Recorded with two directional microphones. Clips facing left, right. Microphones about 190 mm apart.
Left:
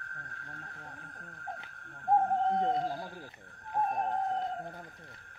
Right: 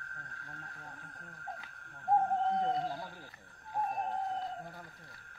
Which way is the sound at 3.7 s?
45° left (ahead or behind).